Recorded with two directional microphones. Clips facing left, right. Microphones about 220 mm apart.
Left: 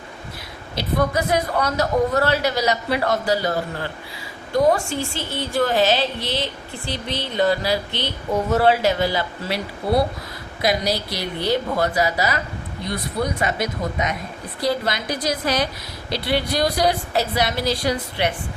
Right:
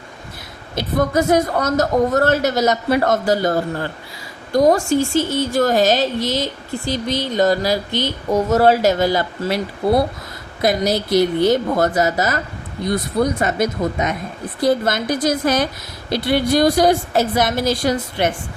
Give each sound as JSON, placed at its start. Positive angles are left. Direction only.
{"t": 0.8, "sound": "a woman's voice", "side_deg": -45}
{"t": 4.5, "sound": "a woman's voice", "side_deg": -40}
{"t": 10.6, "sound": "a woman's voice", "side_deg": -50}
{"t": 13.4, "sound": "a woman's voice", "side_deg": -45}